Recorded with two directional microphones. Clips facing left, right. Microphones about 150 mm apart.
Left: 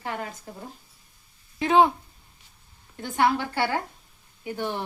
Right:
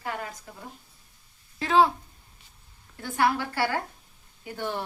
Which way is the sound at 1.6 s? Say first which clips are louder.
Left 2 dB; 20° left (ahead or behind).